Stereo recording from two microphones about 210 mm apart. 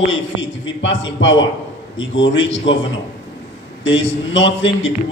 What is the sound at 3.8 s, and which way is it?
A man's voice, 60° left (ahead or behind).